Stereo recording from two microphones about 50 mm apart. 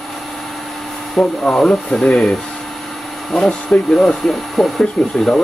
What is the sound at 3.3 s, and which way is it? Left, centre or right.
Speech, centre.